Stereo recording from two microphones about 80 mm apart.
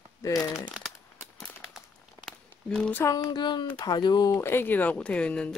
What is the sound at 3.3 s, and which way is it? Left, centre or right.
A child's voice, left.